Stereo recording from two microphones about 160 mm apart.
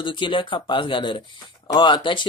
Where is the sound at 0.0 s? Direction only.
30° left (ahead or behind).